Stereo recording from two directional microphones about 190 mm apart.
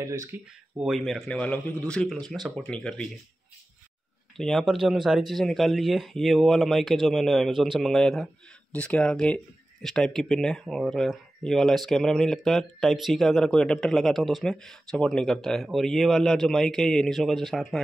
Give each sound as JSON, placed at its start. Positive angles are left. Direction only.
{"t": 0.0, "sound": "speech", "side_deg": -15}
{"t": 0.7, "sound": "speech", "side_deg": 0}
{"t": 4.4, "sound": "speech", "side_deg": 0}